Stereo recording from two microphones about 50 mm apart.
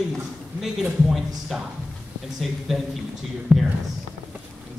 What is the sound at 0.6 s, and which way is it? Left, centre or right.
A man's voice, centre.